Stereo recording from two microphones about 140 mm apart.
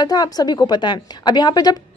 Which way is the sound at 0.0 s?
30° left (ahead or behind).